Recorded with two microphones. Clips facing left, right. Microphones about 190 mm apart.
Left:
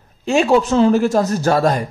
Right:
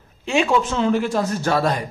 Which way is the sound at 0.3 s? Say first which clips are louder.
Left 5 dB; 40° left (ahead or behind).